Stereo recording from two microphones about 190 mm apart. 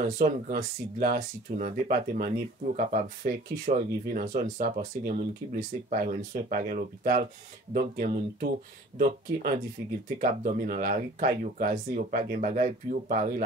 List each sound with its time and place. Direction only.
0.9 s speech: 50° right (ahead or behind)